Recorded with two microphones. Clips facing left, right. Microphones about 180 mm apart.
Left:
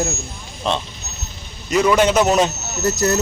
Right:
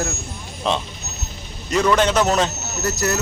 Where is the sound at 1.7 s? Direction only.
10° left (ahead or behind).